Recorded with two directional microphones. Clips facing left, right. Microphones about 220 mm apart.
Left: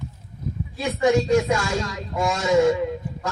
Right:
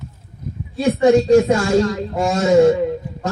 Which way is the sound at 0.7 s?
35° right (ahead or behind).